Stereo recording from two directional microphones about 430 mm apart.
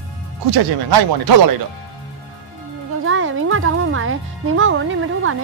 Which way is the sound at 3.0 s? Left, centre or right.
Right.